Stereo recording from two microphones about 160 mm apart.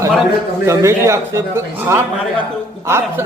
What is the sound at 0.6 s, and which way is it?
A man's voice, 20° right (ahead or behind).